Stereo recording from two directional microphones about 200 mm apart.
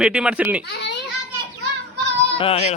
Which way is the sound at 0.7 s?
55° left (ahead or behind).